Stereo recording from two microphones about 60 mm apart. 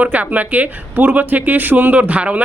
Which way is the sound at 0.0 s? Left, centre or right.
Right.